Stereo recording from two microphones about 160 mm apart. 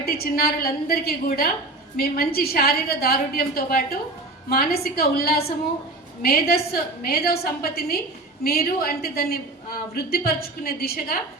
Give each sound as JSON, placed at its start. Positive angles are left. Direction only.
{"t": 0.0, "sound": "a woman's voice", "side_deg": 75}